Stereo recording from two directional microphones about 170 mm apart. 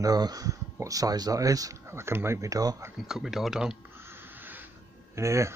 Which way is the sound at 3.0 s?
5° right (ahead or behind).